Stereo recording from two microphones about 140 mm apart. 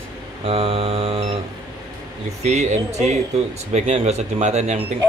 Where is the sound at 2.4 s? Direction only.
55° right (ahead or behind).